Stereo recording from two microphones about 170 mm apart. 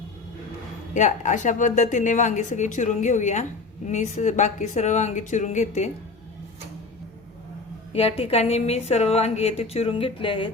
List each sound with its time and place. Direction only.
0.9 s a woman's voice: 45° left (ahead or behind)
7.9 s a woman's voice: 35° left (ahead or behind)